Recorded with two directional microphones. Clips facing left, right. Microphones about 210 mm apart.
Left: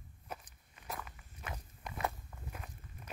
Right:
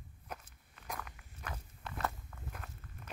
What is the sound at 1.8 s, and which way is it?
Walk, 15° left (ahead or behind).